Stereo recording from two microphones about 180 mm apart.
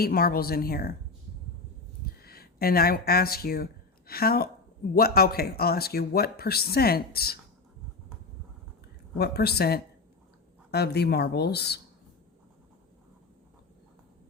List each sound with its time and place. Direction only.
0.0 s speech: 55° left (ahead or behind)
2.2 s speech: 60° left (ahead or behind)
9.1 s speech: 60° left (ahead or behind)